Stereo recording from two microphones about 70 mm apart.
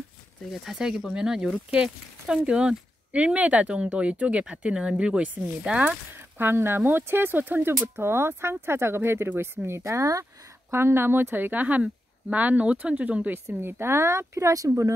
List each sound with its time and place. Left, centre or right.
0.5 s speech: centre
6.1 s speech: right
10.7 s speech: right
13.6 s speech: right